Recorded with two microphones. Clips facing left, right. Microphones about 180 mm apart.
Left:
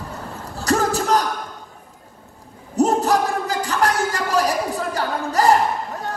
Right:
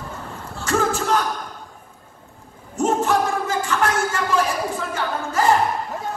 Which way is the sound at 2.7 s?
35° left (ahead or behind).